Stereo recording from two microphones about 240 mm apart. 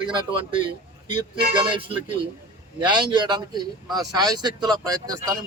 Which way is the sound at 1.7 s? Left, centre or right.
Right.